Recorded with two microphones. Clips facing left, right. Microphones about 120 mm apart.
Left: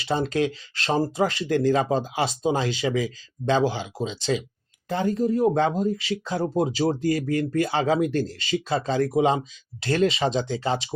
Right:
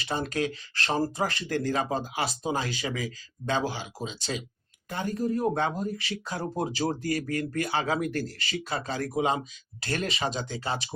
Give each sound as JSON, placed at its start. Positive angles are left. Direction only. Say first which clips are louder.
{"t": 0.0, "sound": "speech", "louder": "left 6 dB", "side_deg": 25}